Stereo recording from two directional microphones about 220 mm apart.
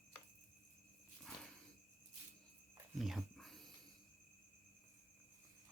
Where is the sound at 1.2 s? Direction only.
Centre (ahead or behind).